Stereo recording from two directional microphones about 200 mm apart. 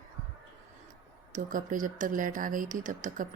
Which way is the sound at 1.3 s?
40° right (ahead or behind).